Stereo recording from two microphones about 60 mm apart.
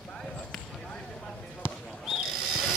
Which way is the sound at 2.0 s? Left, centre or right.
Centre.